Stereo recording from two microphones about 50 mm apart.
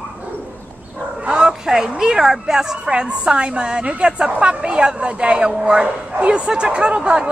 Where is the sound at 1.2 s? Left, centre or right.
Centre.